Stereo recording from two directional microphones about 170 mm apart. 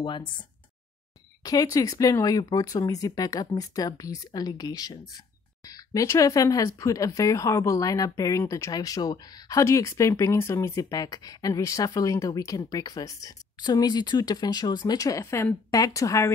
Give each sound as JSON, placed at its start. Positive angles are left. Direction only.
{"t": 1.4, "sound": "speech", "side_deg": 20}